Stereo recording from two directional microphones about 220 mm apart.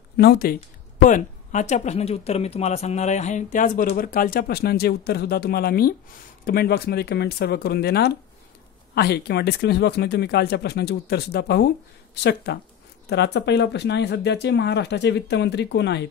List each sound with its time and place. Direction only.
0.2 s speech: 45° left (ahead or behind)
1.0 s speech: 35° left (ahead or behind); by 16.1 s 50° left (ahead or behind)